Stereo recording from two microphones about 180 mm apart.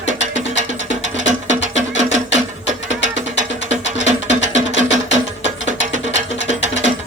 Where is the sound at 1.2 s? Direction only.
45° right (ahead or behind).